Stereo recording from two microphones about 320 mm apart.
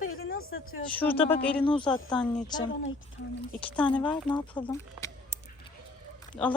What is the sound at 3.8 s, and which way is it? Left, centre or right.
Speech, centre.